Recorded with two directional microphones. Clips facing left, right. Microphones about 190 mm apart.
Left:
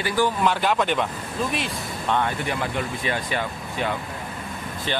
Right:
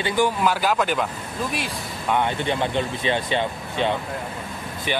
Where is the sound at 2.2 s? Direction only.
25° right (ahead or behind).